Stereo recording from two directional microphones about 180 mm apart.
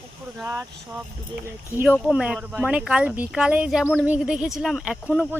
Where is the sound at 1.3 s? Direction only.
10° right (ahead or behind).